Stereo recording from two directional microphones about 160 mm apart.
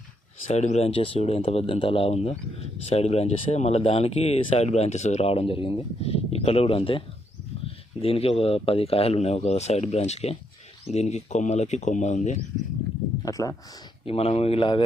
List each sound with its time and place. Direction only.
0.4 s speech: 45° left (ahead or behind)
8.0 s speech: 40° left (ahead or behind)
13.2 s speech: 20° left (ahead or behind)
14.0 s speech: 35° left (ahead or behind)